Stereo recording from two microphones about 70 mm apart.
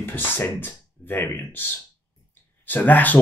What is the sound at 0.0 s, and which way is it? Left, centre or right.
Speech, left.